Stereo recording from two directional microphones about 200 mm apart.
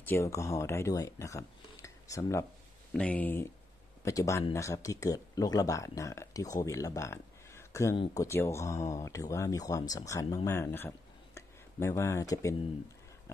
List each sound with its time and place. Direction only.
0.0 s speech: 10° left (ahead or behind)